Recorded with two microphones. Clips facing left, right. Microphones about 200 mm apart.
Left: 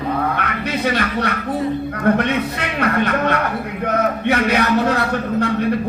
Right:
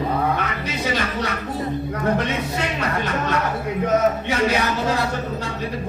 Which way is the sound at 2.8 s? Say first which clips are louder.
Left 6 dB; 60° left (ahead or behind).